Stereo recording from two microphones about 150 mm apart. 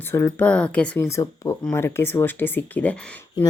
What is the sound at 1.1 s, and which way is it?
Speech, 20° left (ahead or behind).